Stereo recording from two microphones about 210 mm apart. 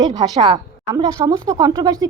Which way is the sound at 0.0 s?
20° right (ahead or behind).